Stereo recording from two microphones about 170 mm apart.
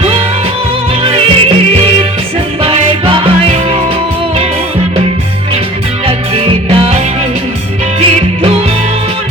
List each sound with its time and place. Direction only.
1.0 s music: 30° right (ahead or behind)
6.1 s music: 35° right (ahead or behind)